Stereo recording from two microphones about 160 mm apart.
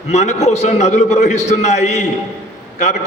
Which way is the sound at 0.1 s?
45° left (ahead or behind).